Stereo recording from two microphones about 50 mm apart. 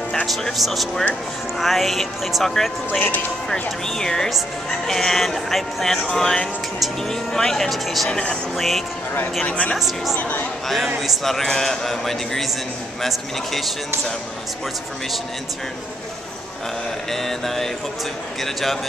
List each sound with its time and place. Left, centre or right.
0.3 s a man's voice: centre
2.9 s speech: left
3.8 s speech: centre
8.1 s speech: centre
8.5 s a man's voice: centre
9.5 s a woman's voice: left
9.8 s a man's voice: centre
17.1 s a man's voice: centre